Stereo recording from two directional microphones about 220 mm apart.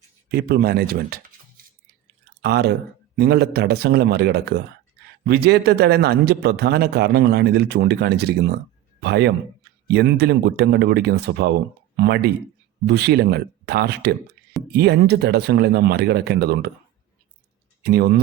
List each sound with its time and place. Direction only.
0.3 s a man's voice: 45° right (ahead or behind)
17.8 s a man's voice: 45° right (ahead or behind)